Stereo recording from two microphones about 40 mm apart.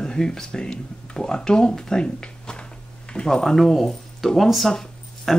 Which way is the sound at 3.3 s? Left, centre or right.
Centre.